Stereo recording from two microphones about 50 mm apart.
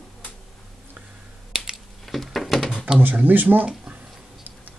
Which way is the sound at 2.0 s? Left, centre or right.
Centre.